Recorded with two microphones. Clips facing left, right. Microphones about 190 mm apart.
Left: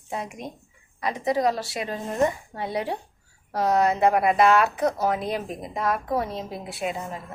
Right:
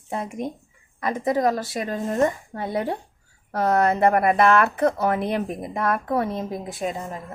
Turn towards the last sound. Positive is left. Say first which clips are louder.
# right 2 dB
turn(degrees=-45)  # may be behind; listen again after turning